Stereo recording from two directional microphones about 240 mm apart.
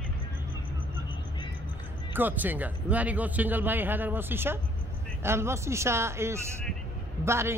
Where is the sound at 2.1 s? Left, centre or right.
Centre.